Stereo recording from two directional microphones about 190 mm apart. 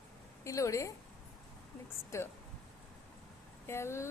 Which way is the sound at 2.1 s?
15° left (ahead or behind).